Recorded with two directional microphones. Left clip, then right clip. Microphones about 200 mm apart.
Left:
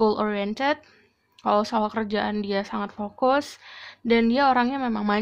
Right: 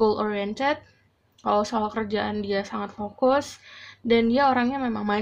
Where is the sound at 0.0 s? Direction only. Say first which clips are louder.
Even; 45° left (ahead or behind).